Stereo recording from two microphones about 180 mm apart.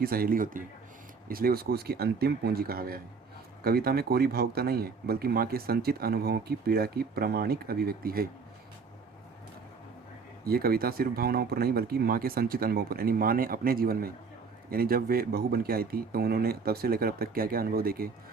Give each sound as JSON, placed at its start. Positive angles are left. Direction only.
{"t": 0.0, "sound": "speech", "side_deg": -55}
{"t": 10.4, "sound": "speech", "side_deg": -55}